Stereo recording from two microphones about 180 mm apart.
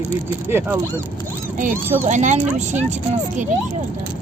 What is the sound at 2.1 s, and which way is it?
Speech, 40° right (ahead or behind).